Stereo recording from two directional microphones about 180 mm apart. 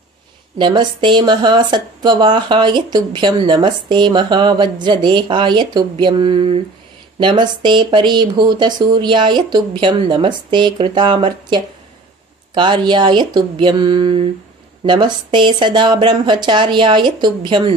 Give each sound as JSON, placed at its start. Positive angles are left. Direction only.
{"t": 0.6, "sound": "speech", "side_deg": -25}